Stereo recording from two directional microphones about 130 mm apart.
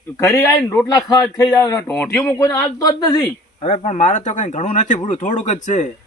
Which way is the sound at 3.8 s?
65° left (ahead or behind).